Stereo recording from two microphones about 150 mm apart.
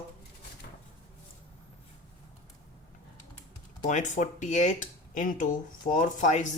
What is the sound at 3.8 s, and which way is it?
Speech, 55° left (ahead or behind).